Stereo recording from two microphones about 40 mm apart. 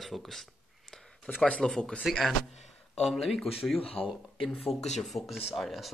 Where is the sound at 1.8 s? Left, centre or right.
Left.